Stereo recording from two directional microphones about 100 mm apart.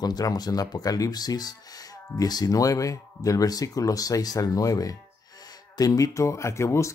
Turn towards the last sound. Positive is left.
turn(degrees=30)  # may be behind; listen again after turning